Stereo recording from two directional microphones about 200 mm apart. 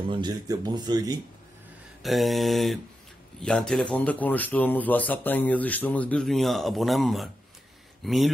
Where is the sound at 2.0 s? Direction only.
Centre (ahead or behind).